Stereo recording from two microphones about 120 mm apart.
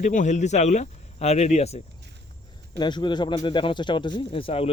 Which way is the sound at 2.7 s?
40° left (ahead or behind).